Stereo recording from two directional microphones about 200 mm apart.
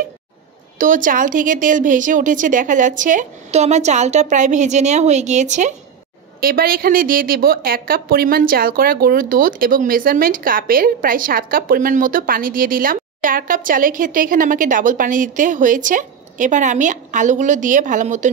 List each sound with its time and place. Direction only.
0.7 s speech: 40° right (ahead or behind)
6.4 s a woman's voice: 45° right (ahead or behind)